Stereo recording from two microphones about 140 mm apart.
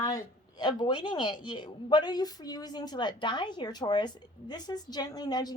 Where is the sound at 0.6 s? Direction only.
30° left (ahead or behind).